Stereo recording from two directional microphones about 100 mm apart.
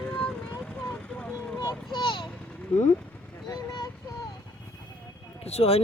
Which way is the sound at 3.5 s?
45° left (ahead or behind).